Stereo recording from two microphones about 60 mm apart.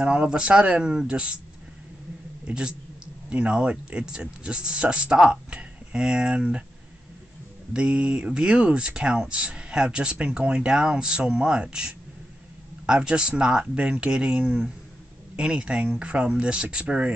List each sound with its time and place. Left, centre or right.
0.0 s speech: centre
2.5 s speech: centre
7.7 s speech: centre